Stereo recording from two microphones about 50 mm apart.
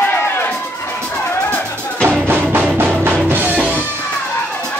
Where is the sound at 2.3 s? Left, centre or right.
Right.